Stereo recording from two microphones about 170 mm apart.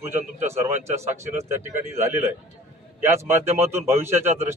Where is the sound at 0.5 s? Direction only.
15° right (ahead or behind).